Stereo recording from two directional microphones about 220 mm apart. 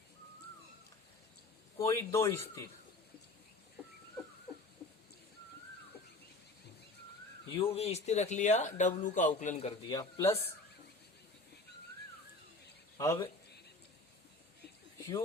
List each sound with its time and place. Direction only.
1.8 s speech: 15° left (ahead or behind)
7.5 s speech: 25° left (ahead or behind)
13.0 s a man's voice: 15° left (ahead or behind)